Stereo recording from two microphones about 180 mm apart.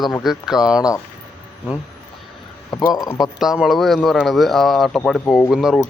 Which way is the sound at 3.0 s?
20° left (ahead or behind).